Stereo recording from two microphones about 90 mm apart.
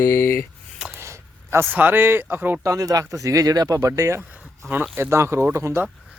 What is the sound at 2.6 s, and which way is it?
Speech, 40° right (ahead or behind).